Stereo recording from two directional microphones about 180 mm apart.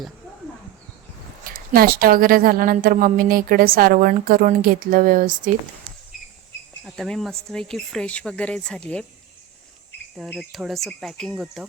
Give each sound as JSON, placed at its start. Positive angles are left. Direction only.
{"t": 1.5, "sound": "a woman's voice", "side_deg": -55}
{"t": 6.8, "sound": "speech", "side_deg": 0}
{"t": 10.2, "sound": "speech", "side_deg": 0}